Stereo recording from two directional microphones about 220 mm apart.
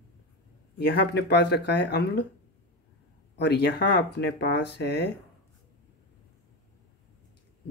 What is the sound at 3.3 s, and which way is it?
Speech, 50° left (ahead or behind).